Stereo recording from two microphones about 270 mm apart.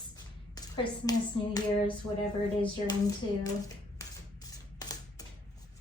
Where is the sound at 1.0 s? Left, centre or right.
Centre.